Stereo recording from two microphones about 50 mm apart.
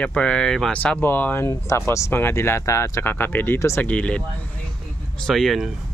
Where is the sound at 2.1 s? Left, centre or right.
Left.